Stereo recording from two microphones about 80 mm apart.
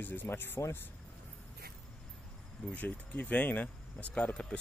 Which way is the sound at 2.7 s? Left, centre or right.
Centre.